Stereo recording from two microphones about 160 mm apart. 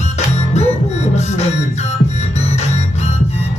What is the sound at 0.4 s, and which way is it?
Music, 45° left (ahead or behind).